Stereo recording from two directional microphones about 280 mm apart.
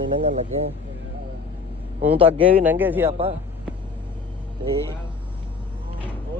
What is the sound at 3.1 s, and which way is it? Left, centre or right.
Speech, right.